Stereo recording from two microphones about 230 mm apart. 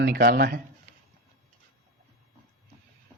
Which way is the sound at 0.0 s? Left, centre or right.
Right.